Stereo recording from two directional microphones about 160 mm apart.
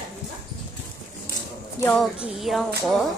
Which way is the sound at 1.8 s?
20° left (ahead or behind).